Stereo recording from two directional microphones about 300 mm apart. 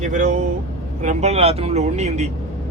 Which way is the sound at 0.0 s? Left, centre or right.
Right.